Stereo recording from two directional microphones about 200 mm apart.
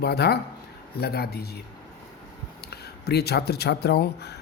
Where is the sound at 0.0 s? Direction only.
55° left (ahead or behind).